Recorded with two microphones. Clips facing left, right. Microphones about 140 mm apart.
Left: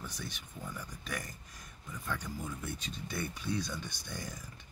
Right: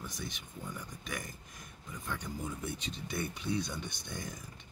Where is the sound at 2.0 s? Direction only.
20° right (ahead or behind).